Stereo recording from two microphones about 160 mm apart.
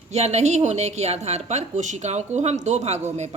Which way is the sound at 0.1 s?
45° right (ahead or behind).